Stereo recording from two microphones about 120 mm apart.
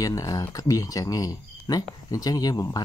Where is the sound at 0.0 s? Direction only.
30° left (ahead or behind).